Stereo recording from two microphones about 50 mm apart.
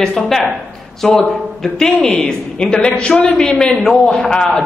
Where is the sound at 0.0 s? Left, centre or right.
Centre.